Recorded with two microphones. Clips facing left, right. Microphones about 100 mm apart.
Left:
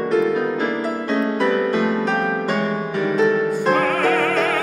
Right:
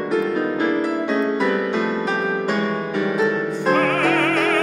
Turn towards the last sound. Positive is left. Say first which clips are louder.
# even
turn(degrees=0)  # may be behind; listen again after turning